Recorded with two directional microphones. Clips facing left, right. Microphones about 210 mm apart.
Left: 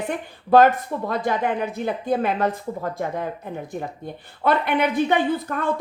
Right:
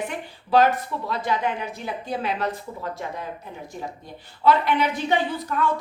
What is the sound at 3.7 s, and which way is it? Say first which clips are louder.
A woman's voice: left 4 dB; 55° left (ahead or behind).